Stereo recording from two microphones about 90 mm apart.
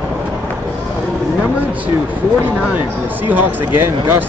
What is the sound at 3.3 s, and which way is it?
Speech, 25° right (ahead or behind).